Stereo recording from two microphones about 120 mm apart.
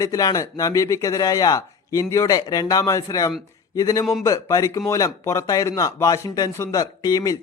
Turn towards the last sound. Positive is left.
turn(degrees=30)  # may be behind; listen again after turning